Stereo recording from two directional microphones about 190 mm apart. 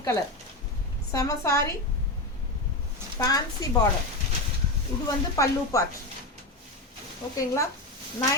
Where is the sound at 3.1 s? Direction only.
20° left (ahead or behind).